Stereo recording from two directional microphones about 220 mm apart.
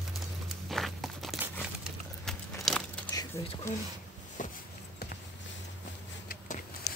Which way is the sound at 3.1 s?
15° left (ahead or behind).